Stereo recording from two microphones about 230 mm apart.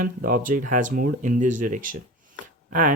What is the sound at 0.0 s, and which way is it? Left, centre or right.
Speech, right.